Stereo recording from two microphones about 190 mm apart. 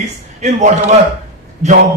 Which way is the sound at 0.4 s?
40° right (ahead or behind).